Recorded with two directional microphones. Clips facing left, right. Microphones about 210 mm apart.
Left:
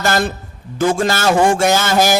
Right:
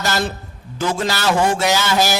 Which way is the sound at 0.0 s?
50° left (ahead or behind).